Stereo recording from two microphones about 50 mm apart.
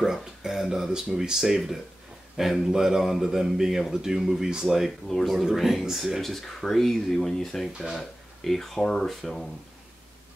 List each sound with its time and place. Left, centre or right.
0.0 s a man's voice: centre
4.8 s speech: centre
6.2 s speech: centre
7.7 s a man's voice: centre
8.0 s speech: centre